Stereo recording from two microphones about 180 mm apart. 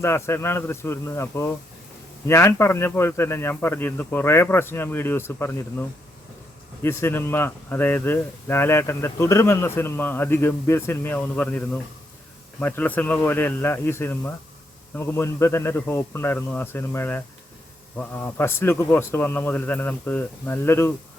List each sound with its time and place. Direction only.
0.0 s speech: 15° left (ahead or behind)
6.8 s speech: 15° left (ahead or behind)